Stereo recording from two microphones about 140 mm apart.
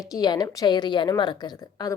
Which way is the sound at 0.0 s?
25° left (ahead or behind).